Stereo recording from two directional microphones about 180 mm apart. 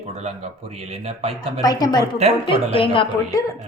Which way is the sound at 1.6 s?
20° left (ahead or behind).